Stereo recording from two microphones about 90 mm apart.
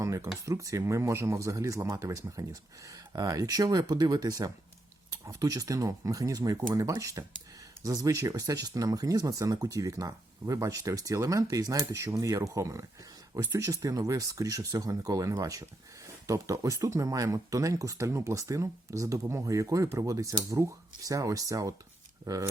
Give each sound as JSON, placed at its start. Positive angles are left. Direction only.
{"t": 0.0, "sound": "speech", "side_deg": -35}